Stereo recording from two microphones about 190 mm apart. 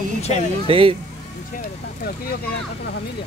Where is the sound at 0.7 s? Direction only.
30° right (ahead or behind).